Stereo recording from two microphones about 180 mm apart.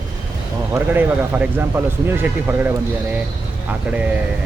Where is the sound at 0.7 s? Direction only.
10° right (ahead or behind).